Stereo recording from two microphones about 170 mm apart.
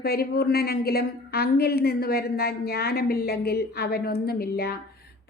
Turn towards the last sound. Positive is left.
turn(degrees=65)  # may be behind; listen again after turning